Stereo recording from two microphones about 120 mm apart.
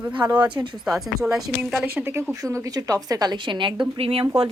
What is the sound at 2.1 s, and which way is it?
A woman's voice, 25° right (ahead or behind).